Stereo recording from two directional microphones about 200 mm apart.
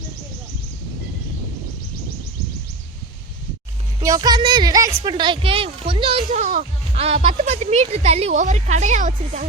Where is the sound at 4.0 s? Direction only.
20° right (ahead or behind).